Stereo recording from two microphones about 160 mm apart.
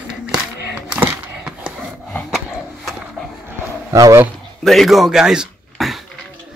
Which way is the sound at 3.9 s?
20° right (ahead or behind).